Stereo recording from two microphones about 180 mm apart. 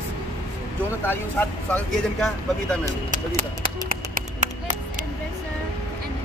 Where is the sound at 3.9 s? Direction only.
50° right (ahead or behind).